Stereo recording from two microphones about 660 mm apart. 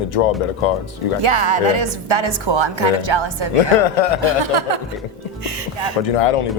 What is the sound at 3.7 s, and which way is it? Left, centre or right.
Speech, left.